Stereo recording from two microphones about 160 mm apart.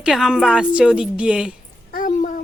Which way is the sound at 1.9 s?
55° left (ahead or behind).